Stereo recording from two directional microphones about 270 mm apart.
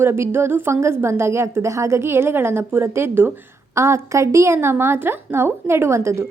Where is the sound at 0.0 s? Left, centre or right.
Centre.